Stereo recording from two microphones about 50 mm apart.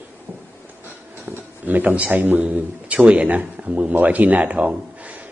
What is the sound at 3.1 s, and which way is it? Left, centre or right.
A man's voice, right.